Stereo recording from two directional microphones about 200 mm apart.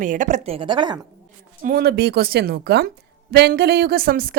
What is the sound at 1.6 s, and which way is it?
Speech, 50° right (ahead or behind).